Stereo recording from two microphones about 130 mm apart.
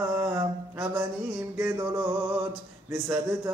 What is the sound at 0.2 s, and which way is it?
Mantra, 25° right (ahead or behind).